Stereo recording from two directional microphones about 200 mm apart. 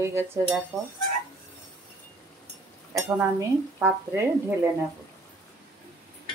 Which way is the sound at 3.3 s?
10° right (ahead or behind).